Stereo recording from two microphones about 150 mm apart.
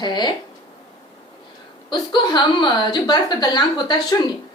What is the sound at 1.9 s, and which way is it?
A woman's voice, 30° left (ahead or behind).